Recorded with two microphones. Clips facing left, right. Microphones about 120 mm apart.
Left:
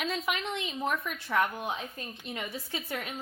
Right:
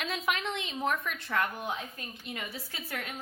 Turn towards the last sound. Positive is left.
turn(degrees=20)  # may be behind; listen again after turning